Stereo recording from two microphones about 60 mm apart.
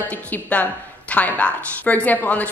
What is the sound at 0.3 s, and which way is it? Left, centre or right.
A woman's voice, left.